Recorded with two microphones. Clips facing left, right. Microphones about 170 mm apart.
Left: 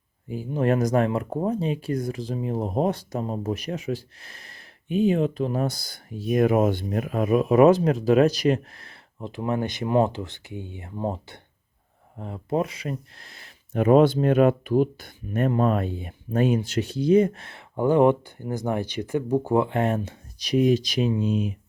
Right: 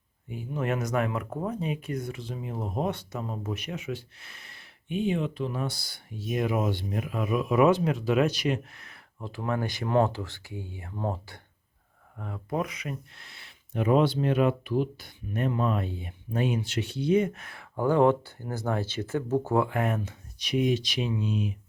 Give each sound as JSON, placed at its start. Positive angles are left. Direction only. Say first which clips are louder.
{"t": 0.3, "sound": "speech", "louder": "left 7 dB", "side_deg": 35}
{"t": 9.1, "sound": "speech", "louder": "left 4 dB", "side_deg": 20}
{"t": 19.6, "sound": "speech", "louder": "left 4 dB", "side_deg": 30}